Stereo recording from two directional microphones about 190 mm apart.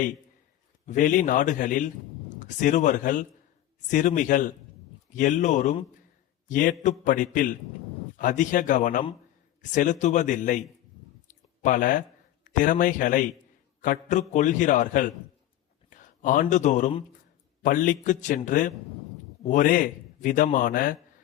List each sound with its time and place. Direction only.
0.9 s a man's voice: 40° left (ahead or behind)
11.3 s a sound: 45° left (ahead or behind)
12.5 s a man's voice: 45° left (ahead or behind)